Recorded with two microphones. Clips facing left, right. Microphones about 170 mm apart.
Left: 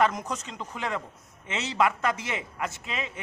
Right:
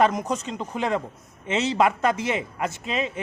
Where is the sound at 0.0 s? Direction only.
20° right (ahead or behind).